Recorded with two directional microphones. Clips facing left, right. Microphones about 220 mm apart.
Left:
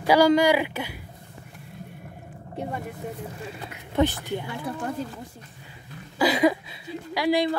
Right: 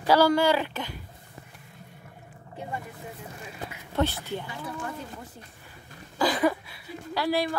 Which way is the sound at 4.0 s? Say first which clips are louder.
Left 4 dB; 15° left (ahead or behind).